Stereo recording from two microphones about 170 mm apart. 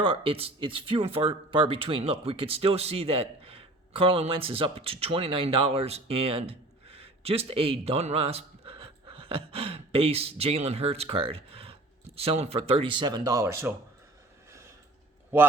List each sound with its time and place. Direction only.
0.0 s speech: 30° right (ahead or behind)
15.3 s a man's voice: 10° right (ahead or behind)